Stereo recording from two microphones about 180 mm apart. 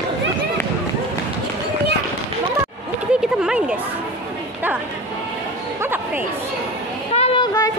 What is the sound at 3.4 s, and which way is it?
Speech, 5° right (ahead or behind).